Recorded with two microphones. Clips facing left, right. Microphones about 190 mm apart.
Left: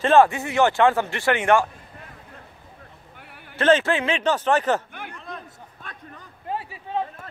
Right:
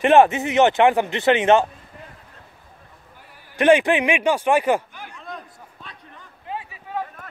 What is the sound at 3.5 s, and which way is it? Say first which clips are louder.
A man's voice: right 3 dB; 15° right (ahead or behind).